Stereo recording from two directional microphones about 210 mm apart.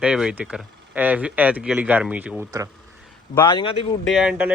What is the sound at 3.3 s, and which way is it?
Speech, 20° left (ahead or behind).